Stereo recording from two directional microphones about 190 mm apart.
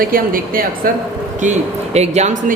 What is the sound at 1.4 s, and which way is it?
Speech, 35° right (ahead or behind).